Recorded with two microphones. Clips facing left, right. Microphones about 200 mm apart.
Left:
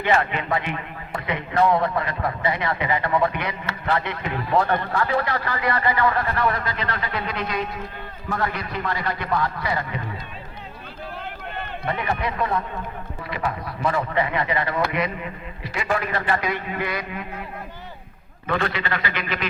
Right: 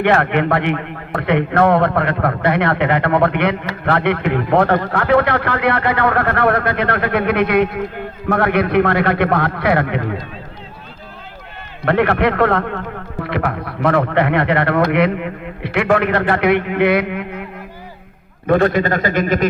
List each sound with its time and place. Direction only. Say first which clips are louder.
0.0 s a man's voice: right 7 dB; 60° right (ahead or behind)
11.9 s a man's voice: right 12 dB; 70° right (ahead or behind)
18.4 s a man's voice: right 11 dB; 50° right (ahead or behind)